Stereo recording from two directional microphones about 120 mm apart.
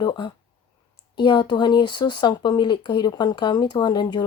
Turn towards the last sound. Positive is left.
turn(degrees=35)  # may be behind; listen again after turning